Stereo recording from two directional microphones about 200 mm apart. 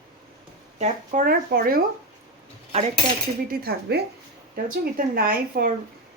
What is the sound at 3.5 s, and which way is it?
A woman's voice, 50° right (ahead or behind).